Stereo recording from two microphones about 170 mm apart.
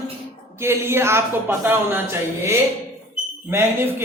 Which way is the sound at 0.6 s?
15° right (ahead or behind).